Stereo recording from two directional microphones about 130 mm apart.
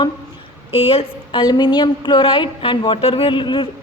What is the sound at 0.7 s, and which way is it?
A woman's voice, 45° left (ahead or behind).